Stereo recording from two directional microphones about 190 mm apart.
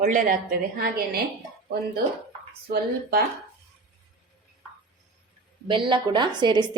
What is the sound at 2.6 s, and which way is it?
Speech, 55° right (ahead or behind).